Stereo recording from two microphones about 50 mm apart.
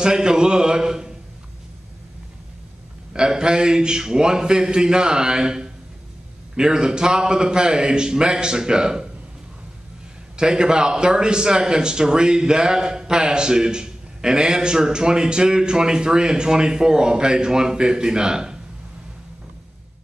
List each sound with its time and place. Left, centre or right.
0.0 s a man's voice: centre
3.1 s a man's voice: centre
10.3 s a man's voice: centre